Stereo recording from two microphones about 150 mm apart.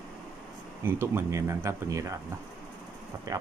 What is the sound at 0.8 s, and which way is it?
Speech, 15° right (ahead or behind).